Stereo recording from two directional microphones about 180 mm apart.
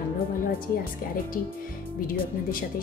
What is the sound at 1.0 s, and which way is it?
Speech, 55° left (ahead or behind).